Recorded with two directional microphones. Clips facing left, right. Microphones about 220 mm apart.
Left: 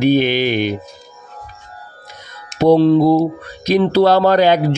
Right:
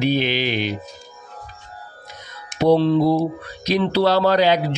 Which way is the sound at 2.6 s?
45° left (ahead or behind).